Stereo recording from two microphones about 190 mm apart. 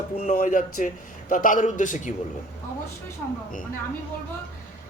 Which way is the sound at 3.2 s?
10° left (ahead or behind).